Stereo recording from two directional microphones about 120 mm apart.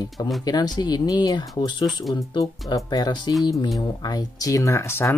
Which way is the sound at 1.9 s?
Centre (ahead or behind).